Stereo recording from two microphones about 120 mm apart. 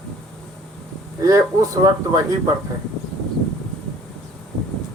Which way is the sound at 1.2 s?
30° right (ahead or behind).